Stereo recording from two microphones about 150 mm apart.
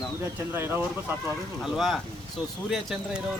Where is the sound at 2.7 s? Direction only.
Centre (ahead or behind).